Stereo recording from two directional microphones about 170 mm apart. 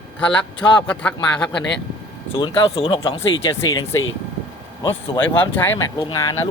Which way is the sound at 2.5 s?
30° left (ahead or behind).